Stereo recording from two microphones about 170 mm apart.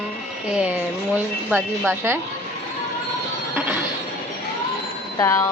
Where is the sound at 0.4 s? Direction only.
5° right (ahead or behind).